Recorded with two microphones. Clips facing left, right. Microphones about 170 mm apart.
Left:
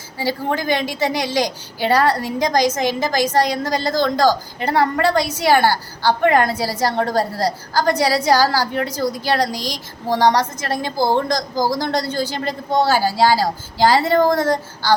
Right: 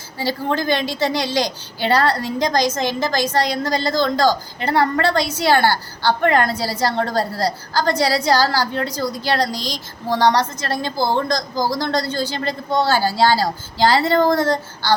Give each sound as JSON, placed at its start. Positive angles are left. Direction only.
{"t": 0.2, "sound": "a woman's voice", "side_deg": 15}